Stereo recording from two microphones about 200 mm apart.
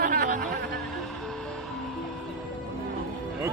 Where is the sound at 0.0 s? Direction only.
45° right (ahead or behind).